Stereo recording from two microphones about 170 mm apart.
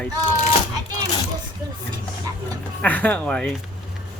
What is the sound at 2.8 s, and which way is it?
Speech, 10° left (ahead or behind).